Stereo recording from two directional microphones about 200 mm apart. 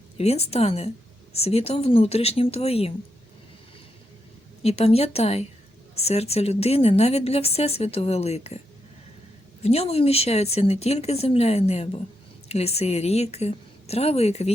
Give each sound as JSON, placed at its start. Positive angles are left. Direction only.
{"t": 0.2, "sound": "speech", "side_deg": 30}
{"t": 4.6, "sound": "speech", "side_deg": 30}
{"t": 9.6, "sound": "speech", "side_deg": 30}